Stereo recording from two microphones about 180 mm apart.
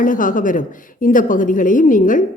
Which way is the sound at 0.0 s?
50° left (ahead or behind).